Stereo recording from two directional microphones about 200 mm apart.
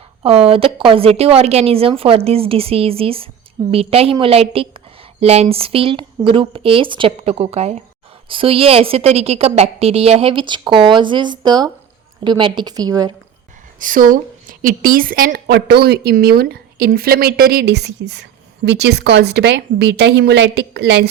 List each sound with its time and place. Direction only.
0.2 s a woman's voice: 30° right (ahead or behind)
13.7 s a woman's voice: 40° right (ahead or behind); by 21.1 s 60° right (ahead or behind)